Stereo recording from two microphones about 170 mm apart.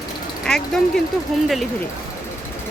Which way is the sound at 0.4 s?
5° left (ahead or behind).